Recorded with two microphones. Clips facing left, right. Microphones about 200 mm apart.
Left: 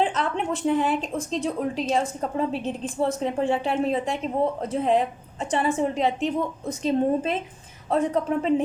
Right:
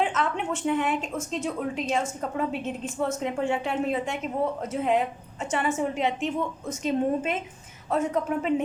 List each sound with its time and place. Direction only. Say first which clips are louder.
0.0 s a woman's voice: left 2 dB; 35° left (ahead or behind)